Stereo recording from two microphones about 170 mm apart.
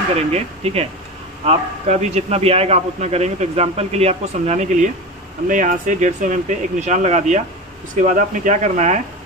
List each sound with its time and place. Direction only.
0.3 s a man's voice: 35° right (ahead or behind)